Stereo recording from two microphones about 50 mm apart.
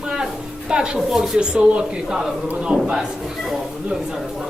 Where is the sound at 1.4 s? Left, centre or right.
Centre.